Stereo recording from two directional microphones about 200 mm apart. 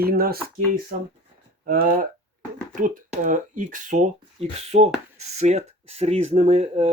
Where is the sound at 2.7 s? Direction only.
40° right (ahead or behind).